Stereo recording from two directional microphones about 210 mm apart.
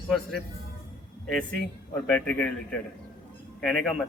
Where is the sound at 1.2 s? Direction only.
5° left (ahead or behind).